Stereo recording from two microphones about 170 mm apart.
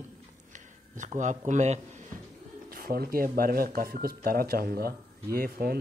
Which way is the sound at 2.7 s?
60° right (ahead or behind).